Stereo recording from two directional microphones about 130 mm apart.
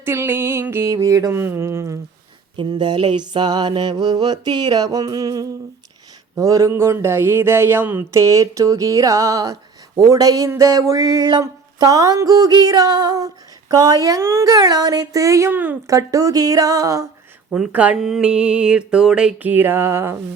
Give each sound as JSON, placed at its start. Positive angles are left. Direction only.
{"t": 0.0, "sound": "speech", "side_deg": -20}
{"t": 2.6, "sound": "mantra", "side_deg": -35}
{"t": 6.3, "sound": "speech", "side_deg": -25}
{"t": 15.9, "sound": "speech", "side_deg": -25}
{"t": 17.5, "sound": "a sound", "side_deg": -10}